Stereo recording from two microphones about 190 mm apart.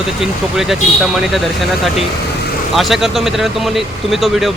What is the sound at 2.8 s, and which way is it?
Speech, centre (ahead or behind).